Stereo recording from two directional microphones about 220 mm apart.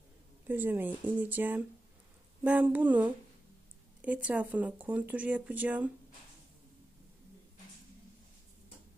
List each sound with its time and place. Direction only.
0.5 s speech: 10° right (ahead or behind)